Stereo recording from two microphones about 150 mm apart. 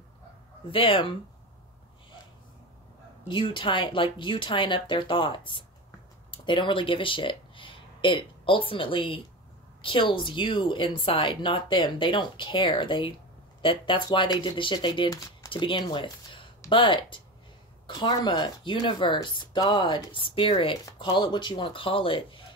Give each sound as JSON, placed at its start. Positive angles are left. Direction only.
{"t": 0.7, "sound": "speech", "side_deg": 35}
{"t": 3.3, "sound": "speech", "side_deg": 30}